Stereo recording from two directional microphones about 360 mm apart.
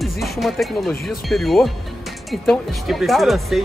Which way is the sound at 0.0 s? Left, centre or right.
Centre.